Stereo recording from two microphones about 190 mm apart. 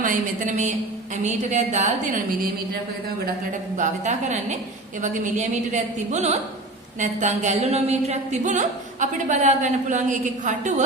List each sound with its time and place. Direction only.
0.0 s a woman's voice: 45° right (ahead or behind)
3.8 s a woman's voice: 40° right (ahead or behind)